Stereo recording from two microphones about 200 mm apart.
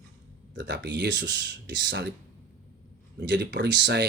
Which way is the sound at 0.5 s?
60° right (ahead or behind).